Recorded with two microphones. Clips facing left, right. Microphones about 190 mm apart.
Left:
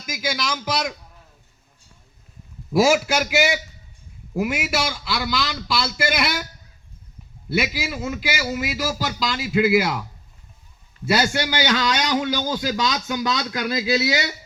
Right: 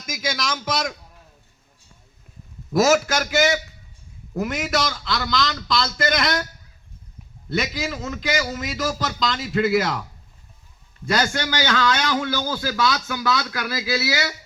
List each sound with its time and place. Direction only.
0.0 s a man's voice: 5° left (ahead or behind)
2.7 s a man's voice: 10° left (ahead or behind)
7.5 s a man's voice: 10° left (ahead or behind)
11.0 s a man's voice: 10° left (ahead or behind)